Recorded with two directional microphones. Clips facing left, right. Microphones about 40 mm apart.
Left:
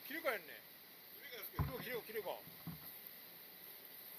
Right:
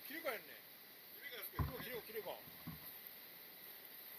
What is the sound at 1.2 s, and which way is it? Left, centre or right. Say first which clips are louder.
Rowboat: even; centre.